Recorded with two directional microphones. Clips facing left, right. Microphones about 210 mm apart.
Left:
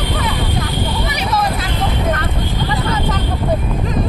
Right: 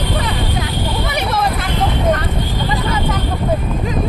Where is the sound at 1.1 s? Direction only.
55° right (ahead or behind).